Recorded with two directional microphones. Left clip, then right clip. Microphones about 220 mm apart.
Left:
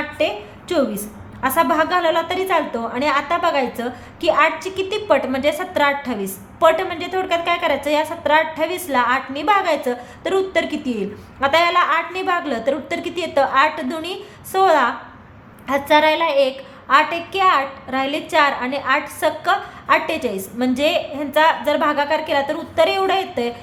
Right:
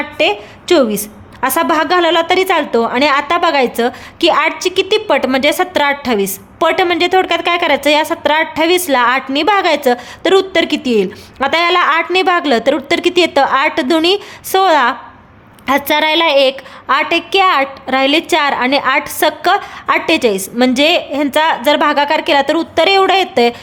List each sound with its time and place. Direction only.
0.2 s a woman's voice: 50° right (ahead or behind)